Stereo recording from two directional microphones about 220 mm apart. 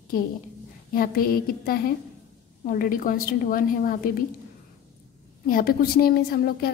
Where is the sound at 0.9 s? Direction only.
40° left (ahead or behind).